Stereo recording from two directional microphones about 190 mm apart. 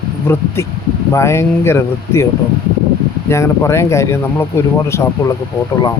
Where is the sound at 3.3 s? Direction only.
15° left (ahead or behind).